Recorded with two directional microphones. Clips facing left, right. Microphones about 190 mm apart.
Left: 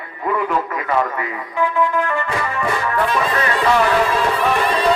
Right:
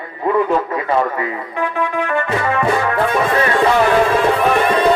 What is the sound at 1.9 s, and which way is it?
Music, 60° right (ahead or behind).